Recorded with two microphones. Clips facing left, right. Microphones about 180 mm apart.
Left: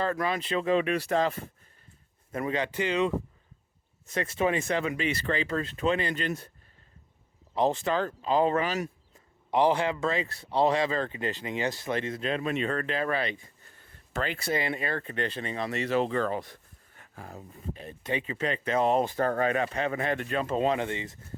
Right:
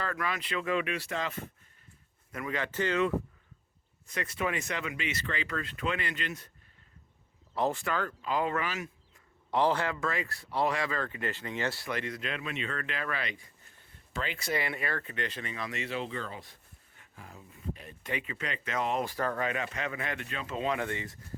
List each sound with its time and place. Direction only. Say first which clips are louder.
0.0 s speech: left 6 dB; 30° left (ahead or behind)
2.3 s speech: left 5 dB; 25° left (ahead or behind)
2.7 s speech: even; 15° left (ahead or behind)
4.0 s speech: left 6 dB; 25° left (ahead or behind)
7.5 s speech: left 5 dB; 20° left (ahead or behind)
9.5 s speech: left 4 dB; 15° left (ahead or behind)
14.1 s speech: left 5 dB; 45° left (ahead or behind)
14.3 s speech: left 2 dB; 25° left (ahead or behind)
20.7 s speech: left 3 dB; 25° left (ahead or behind)